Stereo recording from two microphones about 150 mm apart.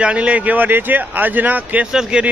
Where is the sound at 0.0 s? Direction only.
10° right (ahead or behind).